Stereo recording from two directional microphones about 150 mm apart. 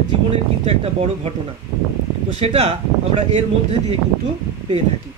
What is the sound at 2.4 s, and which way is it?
Speech, 40° right (ahead or behind).